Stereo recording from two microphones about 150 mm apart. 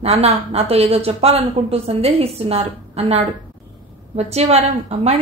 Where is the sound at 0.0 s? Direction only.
45° right (ahead or behind).